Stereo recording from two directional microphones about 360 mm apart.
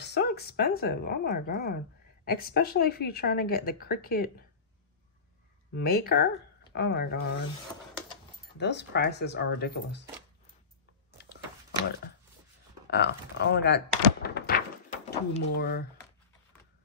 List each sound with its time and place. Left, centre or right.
0.0 s a woman's voice: left
5.8 s a woman's voice: left
8.5 s a woman's voice: left
11.2 s a sound: left
12.9 s a woman's voice: left
14.2 s a sound: left